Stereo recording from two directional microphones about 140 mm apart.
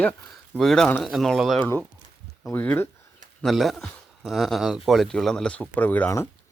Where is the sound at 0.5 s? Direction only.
5° left (ahead or behind).